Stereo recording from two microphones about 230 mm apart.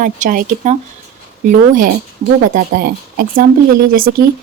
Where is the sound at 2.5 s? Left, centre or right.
Right.